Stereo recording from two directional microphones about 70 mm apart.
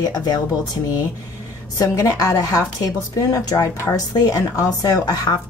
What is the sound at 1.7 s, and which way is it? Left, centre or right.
A woman's voice, left.